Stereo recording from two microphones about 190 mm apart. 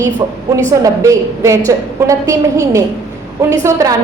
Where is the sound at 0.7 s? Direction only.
15° right (ahead or behind).